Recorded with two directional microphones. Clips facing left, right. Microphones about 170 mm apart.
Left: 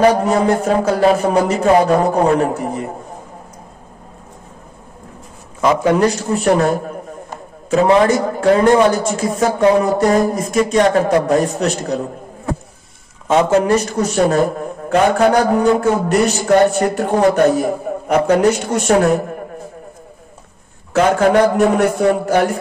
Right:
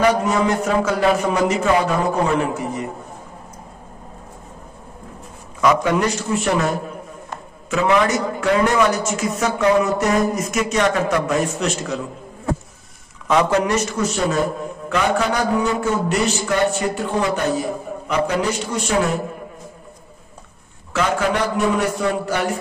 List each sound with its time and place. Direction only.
0.0 s a man's voice: 35° left (ahead or behind)
5.6 s a man's voice: 30° left (ahead or behind)
7.7 s a man's voice: 35° left (ahead or behind)
13.3 s a man's voice: 25° left (ahead or behind)
14.9 s a man's voice: 50° left (ahead or behind)
20.9 s a man's voice: 50° left (ahead or behind)